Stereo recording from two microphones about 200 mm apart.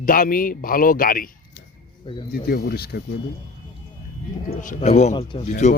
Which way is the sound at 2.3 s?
50° left (ahead or behind).